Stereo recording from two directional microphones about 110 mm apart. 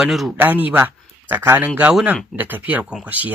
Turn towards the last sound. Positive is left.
turn(degrees=-15)  # may be behind; listen again after turning